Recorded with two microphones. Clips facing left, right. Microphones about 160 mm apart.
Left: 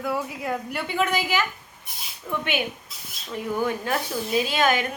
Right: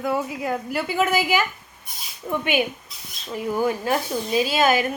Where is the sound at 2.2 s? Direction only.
30° right (ahead or behind).